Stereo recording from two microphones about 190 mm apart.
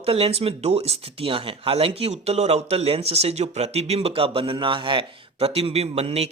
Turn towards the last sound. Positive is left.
turn(degrees=-35)  # may be behind; listen again after turning